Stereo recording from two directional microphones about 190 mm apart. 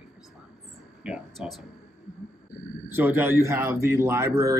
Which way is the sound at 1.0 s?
5° right (ahead or behind).